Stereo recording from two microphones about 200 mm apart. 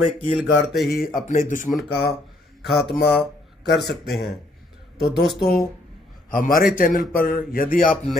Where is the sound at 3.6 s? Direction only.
55° left (ahead or behind).